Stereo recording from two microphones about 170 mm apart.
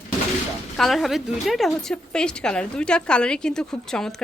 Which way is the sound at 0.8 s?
Centre (ahead or behind).